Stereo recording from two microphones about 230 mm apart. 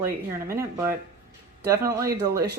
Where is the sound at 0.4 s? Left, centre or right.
Centre.